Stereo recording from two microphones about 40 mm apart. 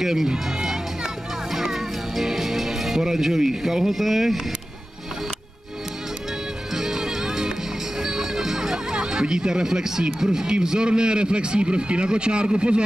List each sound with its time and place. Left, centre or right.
0.0 s speech: centre
0.5 s music: centre
6.7 s music: centre
8.9 s a man's voice: right